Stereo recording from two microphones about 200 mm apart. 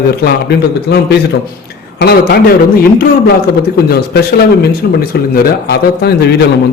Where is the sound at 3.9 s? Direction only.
50° left (ahead or behind).